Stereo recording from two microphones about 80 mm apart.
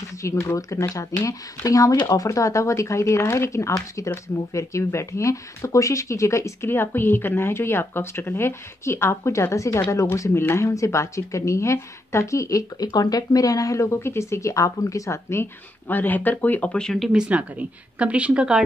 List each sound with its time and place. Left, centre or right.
0.2 s a woman's voice: left
6.7 s a woman's voice: left
15.9 s speech: left; by 17.1 s centre
17.1 s a woman's voice: centre